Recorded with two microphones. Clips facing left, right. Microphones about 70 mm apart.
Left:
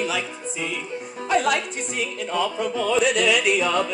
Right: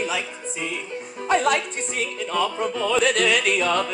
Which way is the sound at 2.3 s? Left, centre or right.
Right.